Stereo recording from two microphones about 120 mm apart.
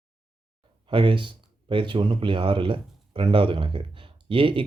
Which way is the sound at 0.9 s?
45° right (ahead or behind).